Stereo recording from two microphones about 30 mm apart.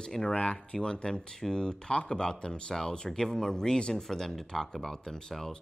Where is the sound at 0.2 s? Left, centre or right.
Left.